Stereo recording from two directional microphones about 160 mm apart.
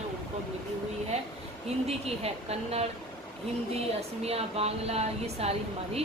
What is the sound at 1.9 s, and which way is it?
Speech, 40° right (ahead or behind).